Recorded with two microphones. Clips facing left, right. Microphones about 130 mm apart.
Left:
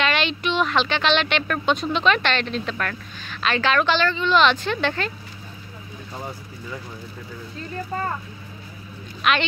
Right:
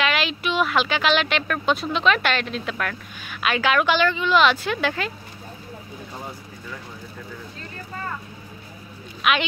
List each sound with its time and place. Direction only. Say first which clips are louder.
0.0 s speech: left 1 dB; 5° right (ahead or behind)
7.9 s vehicle: left 6 dB; 40° left (ahead or behind)
9.2 s speech: even; 5° right (ahead or behind)